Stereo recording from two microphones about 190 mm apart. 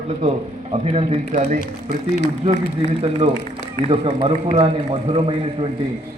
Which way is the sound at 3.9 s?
25° right (ahead or behind).